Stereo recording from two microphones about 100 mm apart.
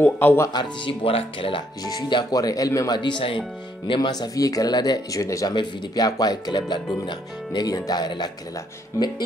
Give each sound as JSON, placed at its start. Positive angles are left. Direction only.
{"t": 0.0, "sound": "speech", "side_deg": 20}
{"t": 0.5, "sound": "speech", "side_deg": 45}
{"t": 1.0, "sound": "speech", "side_deg": 65}
{"t": 1.8, "sound": "speech", "side_deg": 40}
{"t": 2.3, "sound": "speech", "side_deg": 35}
{"t": 3.0, "sound": "speech", "side_deg": 55}
{"t": 5.5, "sound": "speech", "side_deg": 45}